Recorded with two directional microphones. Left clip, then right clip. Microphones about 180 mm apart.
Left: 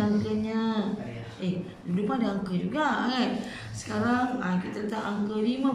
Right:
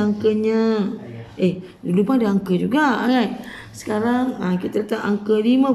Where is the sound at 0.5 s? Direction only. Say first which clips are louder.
Right 11 dB; 60° right (ahead or behind).